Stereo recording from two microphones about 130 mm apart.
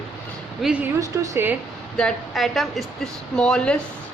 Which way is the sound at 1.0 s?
25° right (ahead or behind).